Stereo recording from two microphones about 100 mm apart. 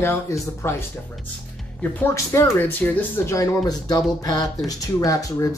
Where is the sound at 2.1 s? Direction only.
25° left (ahead or behind).